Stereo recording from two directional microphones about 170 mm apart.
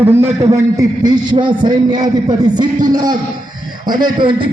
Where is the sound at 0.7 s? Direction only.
25° right (ahead or behind).